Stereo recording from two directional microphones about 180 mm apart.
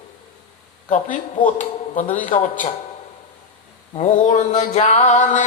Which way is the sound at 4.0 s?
40° left (ahead or behind).